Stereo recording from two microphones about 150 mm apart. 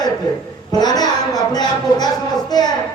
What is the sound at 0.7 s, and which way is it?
Speech, 25° left (ahead or behind).